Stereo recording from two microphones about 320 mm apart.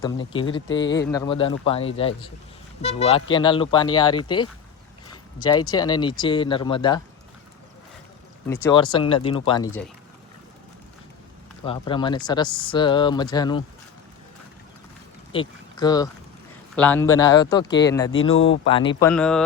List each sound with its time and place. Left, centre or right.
0.0 s speech: centre
8.4 s speech: centre
11.6 s speech: centre
15.3 s speech: centre
18.3 s speech: left
18.6 s speech: centre